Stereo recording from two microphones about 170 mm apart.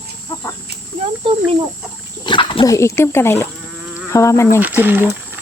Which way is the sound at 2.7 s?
15° left (ahead or behind).